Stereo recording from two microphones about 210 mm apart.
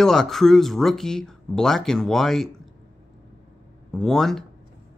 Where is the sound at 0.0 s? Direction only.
Centre (ahead or behind).